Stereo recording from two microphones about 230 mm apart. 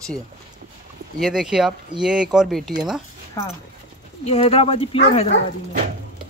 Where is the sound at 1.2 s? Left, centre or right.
Centre.